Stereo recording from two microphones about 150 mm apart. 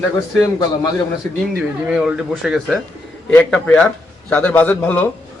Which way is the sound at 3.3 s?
10° left (ahead or behind).